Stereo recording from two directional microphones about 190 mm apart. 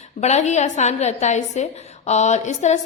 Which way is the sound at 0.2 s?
35° left (ahead or behind).